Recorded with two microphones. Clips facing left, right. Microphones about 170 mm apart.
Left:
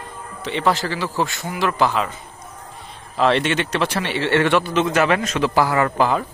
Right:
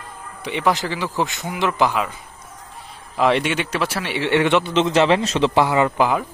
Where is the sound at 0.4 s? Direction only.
15° right (ahead or behind).